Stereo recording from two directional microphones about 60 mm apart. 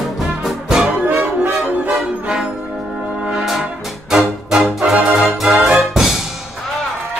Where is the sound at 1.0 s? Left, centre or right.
Right.